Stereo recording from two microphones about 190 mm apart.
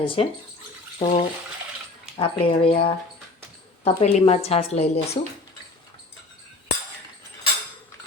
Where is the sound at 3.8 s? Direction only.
35° left (ahead or behind).